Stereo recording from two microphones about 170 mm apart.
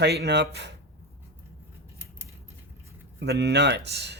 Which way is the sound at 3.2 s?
75° right (ahead or behind).